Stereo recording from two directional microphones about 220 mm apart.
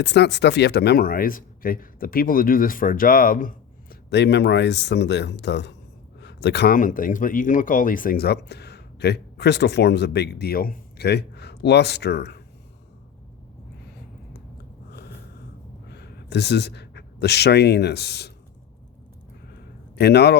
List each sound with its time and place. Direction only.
0.0 s speech: 50° left (ahead or behind)
15.9 s a man's voice: 50° left (ahead or behind)
20.0 s speech: 50° left (ahead or behind)